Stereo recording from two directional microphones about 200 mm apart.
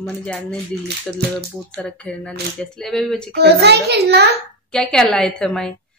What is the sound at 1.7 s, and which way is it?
Speech, 5° left (ahead or behind).